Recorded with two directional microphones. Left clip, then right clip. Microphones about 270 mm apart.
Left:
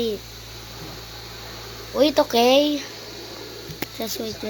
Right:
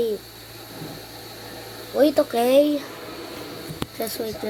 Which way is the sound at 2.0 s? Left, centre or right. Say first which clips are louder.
Left 1 dB; left.